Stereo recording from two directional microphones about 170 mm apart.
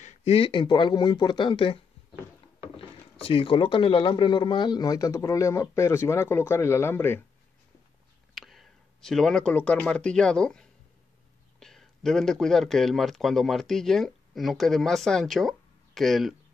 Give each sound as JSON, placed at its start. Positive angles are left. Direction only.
{"t": 0.0, "sound": "speech", "side_deg": 40}
{"t": 2.8, "sound": "speech", "side_deg": 30}
{"t": 8.4, "sound": "a man's voice", "side_deg": 0}